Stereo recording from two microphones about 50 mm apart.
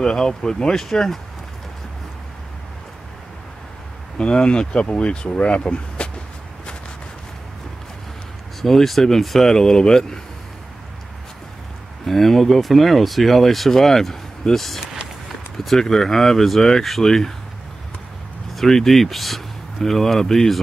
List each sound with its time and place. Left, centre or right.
0.0 s speech: centre
4.2 s speech: centre
8.5 s speech: centre
12.1 s speech: centre
18.5 s speech: centre